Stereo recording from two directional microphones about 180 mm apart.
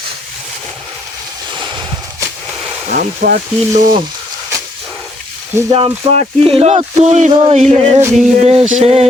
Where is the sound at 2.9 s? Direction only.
55° right (ahead or behind).